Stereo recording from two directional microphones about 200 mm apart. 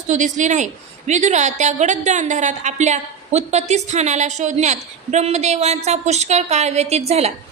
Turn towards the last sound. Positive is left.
turn(degrees=-30)  # may be behind; listen again after turning